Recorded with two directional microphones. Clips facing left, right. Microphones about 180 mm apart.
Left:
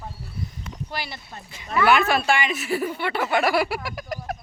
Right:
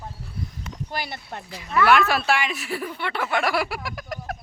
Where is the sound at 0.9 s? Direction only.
50° right (ahead or behind).